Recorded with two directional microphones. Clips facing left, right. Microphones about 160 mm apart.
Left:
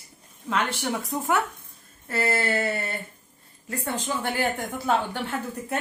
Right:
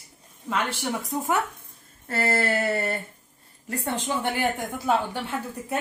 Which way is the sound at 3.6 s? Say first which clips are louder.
Right 1 dB; 25° right (ahead or behind).